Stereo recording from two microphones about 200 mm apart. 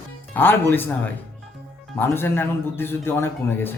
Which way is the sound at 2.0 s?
10° left (ahead or behind).